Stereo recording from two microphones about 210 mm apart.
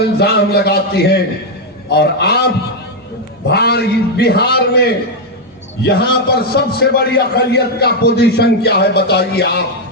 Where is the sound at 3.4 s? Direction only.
50° left (ahead or behind).